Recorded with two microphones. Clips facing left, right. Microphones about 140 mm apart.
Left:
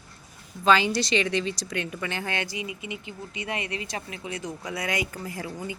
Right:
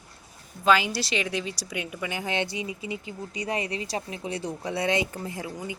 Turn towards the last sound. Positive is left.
turn(degrees=-15)  # may be behind; listen again after turning